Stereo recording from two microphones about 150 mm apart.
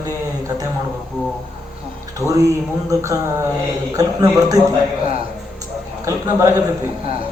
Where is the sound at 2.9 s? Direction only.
20° right (ahead or behind).